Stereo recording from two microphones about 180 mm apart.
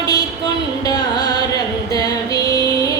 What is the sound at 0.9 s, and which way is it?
Carnatic music, 20° left (ahead or behind).